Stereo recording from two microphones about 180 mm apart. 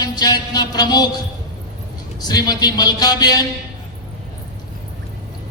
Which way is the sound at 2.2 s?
20° left (ahead or behind).